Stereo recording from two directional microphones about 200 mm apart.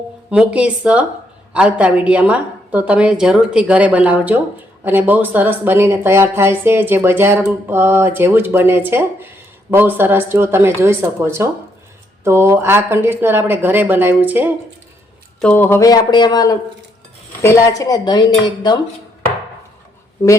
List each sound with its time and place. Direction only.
0.3 s a woman's voice: 5° right (ahead or behind)
15.4 s speech: 5° left (ahead or behind)